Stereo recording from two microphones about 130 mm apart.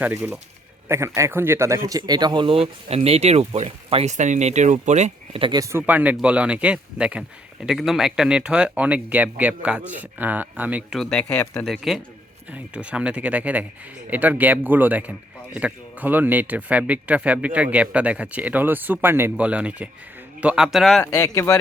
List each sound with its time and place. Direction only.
0.0 s speech: 15° right (ahead or behind); by 4.1 s 50° right (ahead or behind)
4.1 s speech: 65° right (ahead or behind)
5.3 s speech: 40° right (ahead or behind)
5.5 s speech: 25° right (ahead or behind)
5.8 s speech: 15° right (ahead or behind)
10.9 s speech: 5° left (ahead or behind)
21.0 s speech: 25° left (ahead or behind)